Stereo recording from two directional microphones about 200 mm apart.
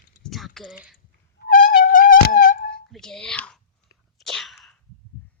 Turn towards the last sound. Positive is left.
turn(degrees=0)  # may be behind; listen again after turning